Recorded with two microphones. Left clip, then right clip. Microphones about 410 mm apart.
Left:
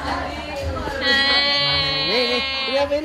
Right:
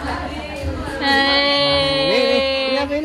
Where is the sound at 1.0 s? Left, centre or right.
Centre.